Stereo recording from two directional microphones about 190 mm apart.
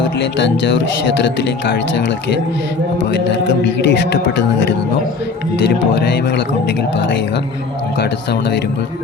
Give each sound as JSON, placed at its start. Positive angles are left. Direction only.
{"t": 3.3, "sound": "music", "side_deg": 65}
{"t": 5.9, "sound": "speech", "side_deg": 60}
{"t": 7.9, "sound": "speech", "side_deg": 60}